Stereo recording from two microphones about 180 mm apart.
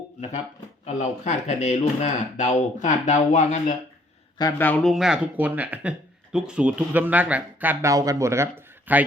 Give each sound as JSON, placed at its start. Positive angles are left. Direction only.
{"t": 0.9, "sound": "speech", "side_deg": 40}
{"t": 4.4, "sound": "speech", "side_deg": 15}